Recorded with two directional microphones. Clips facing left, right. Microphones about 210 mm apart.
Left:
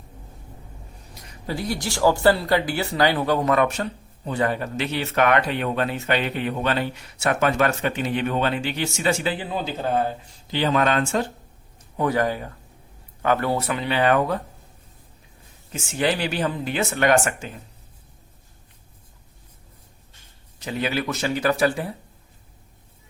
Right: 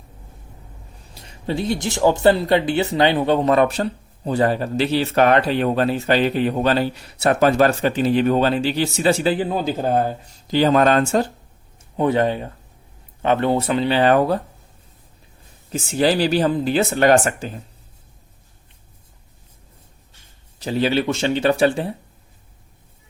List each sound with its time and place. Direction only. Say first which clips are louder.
1.1 s speech: right 5 dB; 30° right (ahead or behind)
11.8 s a man's voice: right 4 dB; 25° right (ahead or behind)
15.7 s speech: right 5 dB; 35° right (ahead or behind)
20.6 s speech: right 6 dB; 30° right (ahead or behind)